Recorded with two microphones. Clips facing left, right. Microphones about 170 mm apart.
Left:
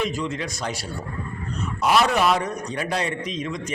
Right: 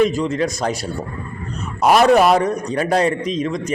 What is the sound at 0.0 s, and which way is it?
Speech, 40° right (ahead or behind).